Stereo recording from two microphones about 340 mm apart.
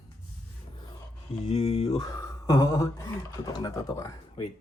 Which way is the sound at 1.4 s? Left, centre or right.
Centre.